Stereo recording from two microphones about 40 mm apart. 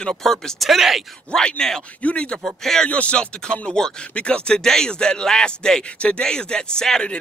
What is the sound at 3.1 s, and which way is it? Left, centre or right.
Speech, left.